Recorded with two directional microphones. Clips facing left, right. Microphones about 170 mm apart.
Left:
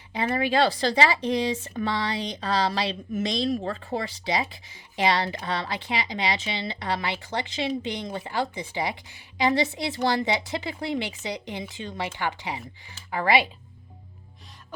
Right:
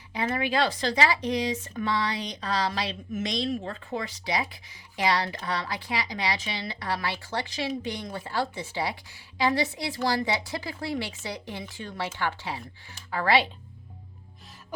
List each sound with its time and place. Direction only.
0.1 s a woman's voice: 30° left (ahead or behind); by 13.5 s 15° left (ahead or behind)